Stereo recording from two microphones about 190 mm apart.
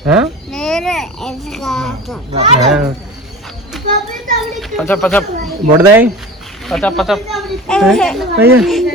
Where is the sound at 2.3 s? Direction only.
30° right (ahead or behind).